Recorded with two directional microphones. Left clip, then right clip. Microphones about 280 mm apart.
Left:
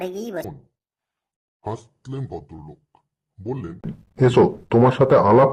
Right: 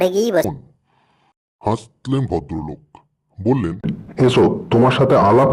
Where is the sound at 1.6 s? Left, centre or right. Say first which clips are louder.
Right 10 dB; right.